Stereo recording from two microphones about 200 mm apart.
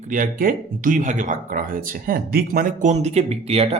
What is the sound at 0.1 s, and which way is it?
Speech, 45° right (ahead or behind).